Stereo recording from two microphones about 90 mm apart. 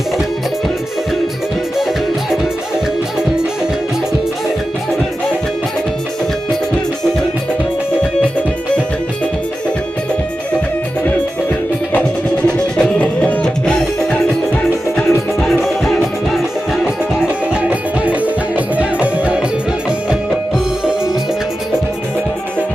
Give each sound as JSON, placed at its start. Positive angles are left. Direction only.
{"t": 1.7, "sound": "music", "side_deg": -5}
{"t": 12.5, "sound": "music", "side_deg": 10}